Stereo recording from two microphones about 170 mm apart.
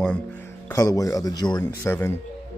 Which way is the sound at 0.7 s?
20° left (ahead or behind).